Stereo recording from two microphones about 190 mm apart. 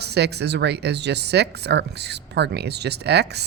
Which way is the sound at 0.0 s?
60° right (ahead or behind).